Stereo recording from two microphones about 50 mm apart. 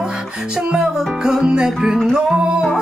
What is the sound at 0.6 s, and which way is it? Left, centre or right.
Music, centre.